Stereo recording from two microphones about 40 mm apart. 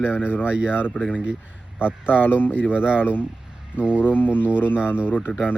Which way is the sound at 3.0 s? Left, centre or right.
Left.